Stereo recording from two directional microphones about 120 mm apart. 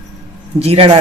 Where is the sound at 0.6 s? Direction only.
55° right (ahead or behind).